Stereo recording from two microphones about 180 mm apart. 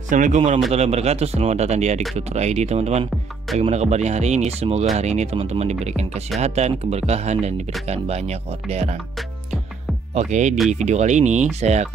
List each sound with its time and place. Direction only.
0.1 s a man's voice: 45° right (ahead or behind)
10.1 s speech: 40° right (ahead or behind)